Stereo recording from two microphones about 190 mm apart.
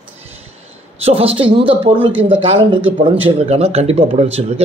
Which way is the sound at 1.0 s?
30° right (ahead or behind).